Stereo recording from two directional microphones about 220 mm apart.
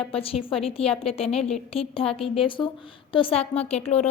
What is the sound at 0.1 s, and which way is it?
A woman's voice, 25° left (ahead or behind).